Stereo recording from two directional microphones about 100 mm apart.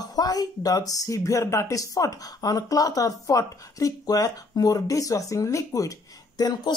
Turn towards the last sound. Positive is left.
turn(degrees=40)  # may be behind; listen again after turning